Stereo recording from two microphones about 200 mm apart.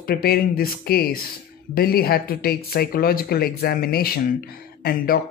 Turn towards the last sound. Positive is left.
turn(degrees=50)  # may be behind; listen again after turning